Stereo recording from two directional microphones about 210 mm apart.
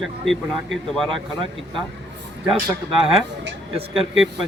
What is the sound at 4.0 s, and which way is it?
Speech, centre (ahead or behind).